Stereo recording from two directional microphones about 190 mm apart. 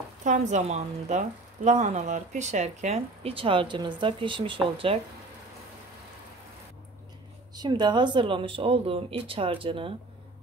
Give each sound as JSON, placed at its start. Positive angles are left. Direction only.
{"t": 0.2, "sound": "speech", "side_deg": -40}
{"t": 7.5, "sound": "speech", "side_deg": -20}